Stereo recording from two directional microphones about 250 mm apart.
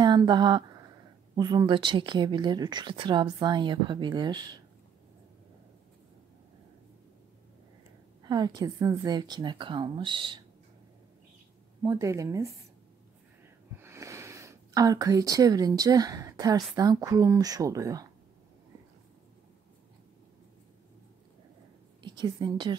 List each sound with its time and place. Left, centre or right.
0.0 s speech: centre
8.2 s speech: centre
11.8 s speech: centre
13.7 s speech: centre
22.0 s a woman's voice: centre